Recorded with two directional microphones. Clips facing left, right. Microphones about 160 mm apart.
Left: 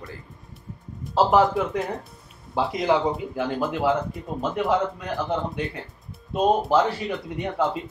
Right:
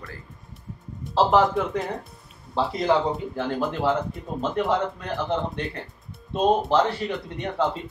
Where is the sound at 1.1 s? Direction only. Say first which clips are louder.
Left 1 dB; 5° left (ahead or behind).